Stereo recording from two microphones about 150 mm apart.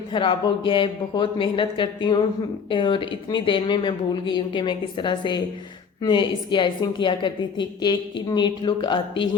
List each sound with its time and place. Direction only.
0.1 s a woman's voice: 30° left (ahead or behind)